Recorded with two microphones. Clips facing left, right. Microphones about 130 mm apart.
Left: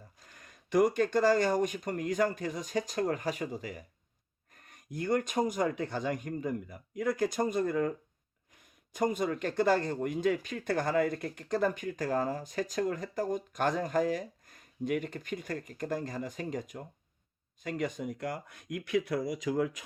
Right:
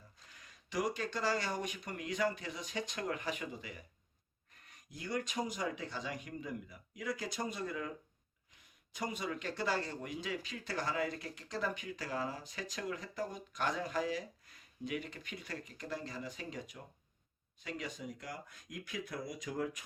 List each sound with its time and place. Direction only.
0.2 s speech: 50° left (ahead or behind); by 19.8 s 90° left